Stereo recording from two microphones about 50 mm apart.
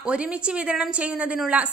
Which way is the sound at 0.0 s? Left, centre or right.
Right.